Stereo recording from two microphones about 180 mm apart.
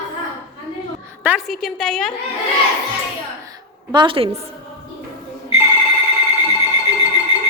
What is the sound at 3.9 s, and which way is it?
Speech, 25° right (ahead or behind).